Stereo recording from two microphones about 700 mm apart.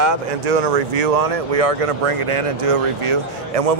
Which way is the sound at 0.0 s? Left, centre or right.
Right.